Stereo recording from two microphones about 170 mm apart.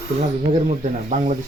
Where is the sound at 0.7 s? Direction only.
45° right (ahead or behind).